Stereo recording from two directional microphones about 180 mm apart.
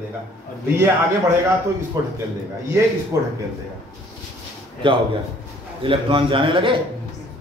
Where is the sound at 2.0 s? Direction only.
20° right (ahead or behind).